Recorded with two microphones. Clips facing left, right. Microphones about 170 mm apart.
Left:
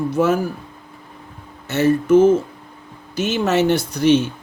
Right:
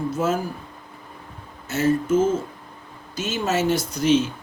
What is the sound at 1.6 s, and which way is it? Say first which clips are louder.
Speech: left 5 dB; 70° left (ahead or behind).